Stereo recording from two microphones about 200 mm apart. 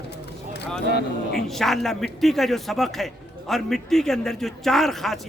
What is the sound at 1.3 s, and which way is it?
A man's voice, centre (ahead or behind).